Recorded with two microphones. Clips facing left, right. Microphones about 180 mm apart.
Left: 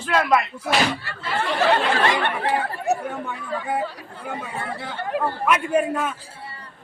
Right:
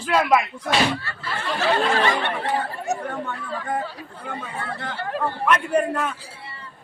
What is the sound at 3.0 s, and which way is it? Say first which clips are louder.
A man's voice: even; 10° left (ahead or behind).